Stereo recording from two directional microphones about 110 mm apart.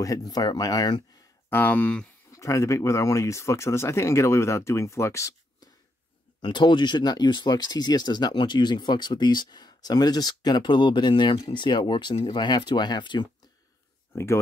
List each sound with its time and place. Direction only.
0.0 s speech: 35° left (ahead or behind)
1.5 s speech: 15° left (ahead or behind)
2.3 s speech: 30° left (ahead or behind)
6.4 s speech: 45° left (ahead or behind)
14.1 s speech: 25° left (ahead or behind)